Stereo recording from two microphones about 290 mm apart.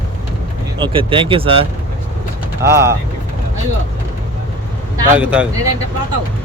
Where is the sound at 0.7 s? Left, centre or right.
Centre.